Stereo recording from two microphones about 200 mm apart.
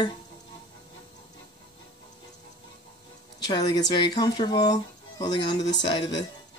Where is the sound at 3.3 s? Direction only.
20° left (ahead or behind).